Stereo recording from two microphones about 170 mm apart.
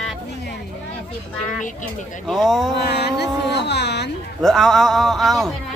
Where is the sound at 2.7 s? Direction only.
80° left.